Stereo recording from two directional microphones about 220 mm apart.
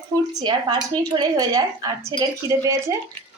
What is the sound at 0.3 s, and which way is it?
A woman's voice, 20° right (ahead or behind).